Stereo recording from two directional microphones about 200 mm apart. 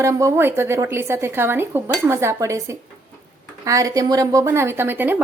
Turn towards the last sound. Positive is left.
turn(degrees=-10)  # may be behind; listen again after turning